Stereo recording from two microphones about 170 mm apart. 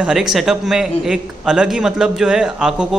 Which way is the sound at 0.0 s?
5° right (ahead or behind).